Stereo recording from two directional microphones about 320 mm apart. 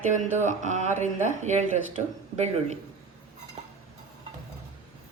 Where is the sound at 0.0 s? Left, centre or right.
Right.